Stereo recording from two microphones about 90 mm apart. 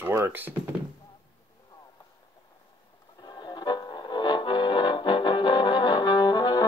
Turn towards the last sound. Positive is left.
turn(degrees=50)  # may be behind; listen again after turning